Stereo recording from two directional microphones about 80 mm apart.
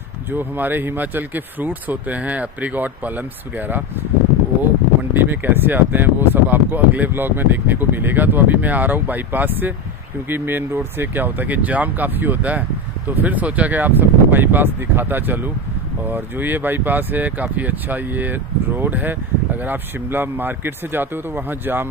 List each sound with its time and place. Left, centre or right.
0.3 s speech: right
5.1 s speech: right